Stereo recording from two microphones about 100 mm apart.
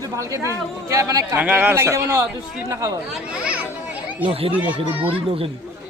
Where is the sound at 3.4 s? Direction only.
15° right (ahead or behind).